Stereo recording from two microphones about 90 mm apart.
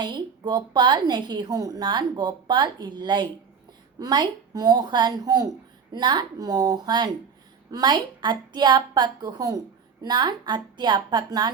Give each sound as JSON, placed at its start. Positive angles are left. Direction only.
{"t": 0.0, "sound": "a woman's voice", "side_deg": -55}